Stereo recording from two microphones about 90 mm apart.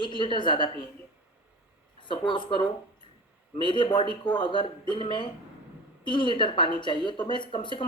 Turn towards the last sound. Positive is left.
turn(degrees=65)  # may be behind; listen again after turning